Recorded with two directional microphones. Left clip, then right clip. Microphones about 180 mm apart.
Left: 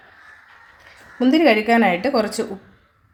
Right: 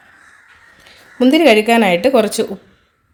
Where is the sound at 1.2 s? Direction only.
45° right (ahead or behind).